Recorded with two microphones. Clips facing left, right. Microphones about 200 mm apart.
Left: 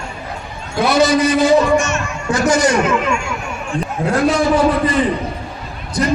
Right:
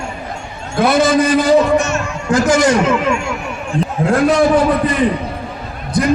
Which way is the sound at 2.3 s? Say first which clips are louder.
Right 2 dB; 90° right.